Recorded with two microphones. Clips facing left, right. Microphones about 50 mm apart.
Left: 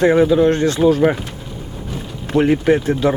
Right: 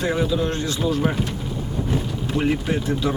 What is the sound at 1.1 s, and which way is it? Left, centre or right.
Speech, left.